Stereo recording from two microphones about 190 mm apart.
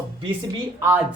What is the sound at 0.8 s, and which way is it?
Speech, 10° right (ahead or behind).